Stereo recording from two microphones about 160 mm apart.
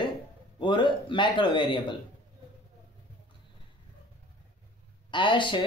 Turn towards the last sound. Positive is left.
turn(degrees=30)  # may be behind; listen again after turning